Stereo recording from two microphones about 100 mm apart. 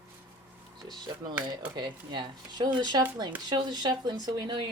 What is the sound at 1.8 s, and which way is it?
Speech, 50° right (ahead or behind).